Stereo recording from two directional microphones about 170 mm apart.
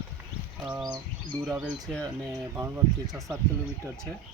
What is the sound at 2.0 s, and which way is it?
Speech, 25° right (ahead or behind).